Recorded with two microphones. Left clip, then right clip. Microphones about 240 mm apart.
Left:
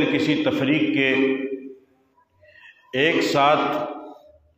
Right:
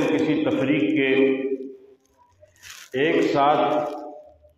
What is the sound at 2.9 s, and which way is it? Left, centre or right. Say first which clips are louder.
Speech: left 1 dB; left.